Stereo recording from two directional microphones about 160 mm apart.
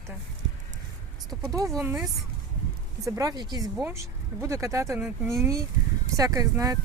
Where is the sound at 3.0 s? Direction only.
20° right (ahead or behind).